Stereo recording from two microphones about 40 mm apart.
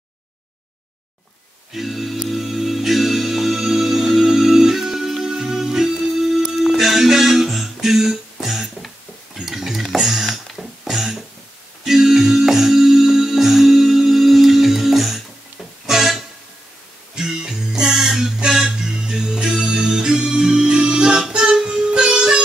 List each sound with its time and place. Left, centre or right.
1.7 s music: centre
9.4 s a sound: centre
11.8 s music: centre
17.1 s music: centre